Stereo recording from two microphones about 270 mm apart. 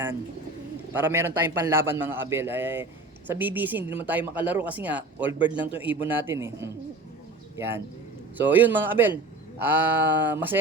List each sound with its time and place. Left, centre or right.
0.9 s a man's voice: centre